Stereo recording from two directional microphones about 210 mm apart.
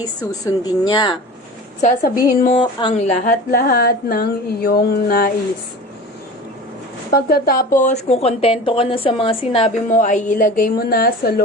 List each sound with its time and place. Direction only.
0.2 s a woman's voice: 15° left (ahead or behind)
1.8 s a woman's voice: 40° left (ahead or behind)
2.6 s a woman's voice: 30° left (ahead or behind)
3.5 s a sound: 45° left (ahead or behind)
7.1 s a sound: 50° left (ahead or behind)
7.8 s a woman's voice: 30° left (ahead or behind)